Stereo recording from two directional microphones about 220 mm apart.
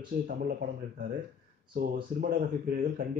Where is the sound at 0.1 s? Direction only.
45° right (ahead or behind).